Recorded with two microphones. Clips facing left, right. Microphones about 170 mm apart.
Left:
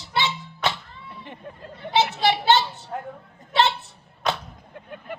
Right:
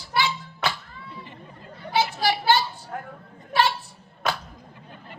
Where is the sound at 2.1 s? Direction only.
25° left (ahead or behind).